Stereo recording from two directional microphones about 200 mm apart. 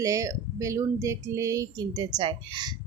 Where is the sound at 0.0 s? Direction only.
15° right (ahead or behind).